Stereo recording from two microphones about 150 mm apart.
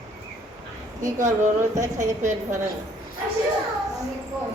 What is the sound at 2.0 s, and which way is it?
Speech, 55° right (ahead or behind).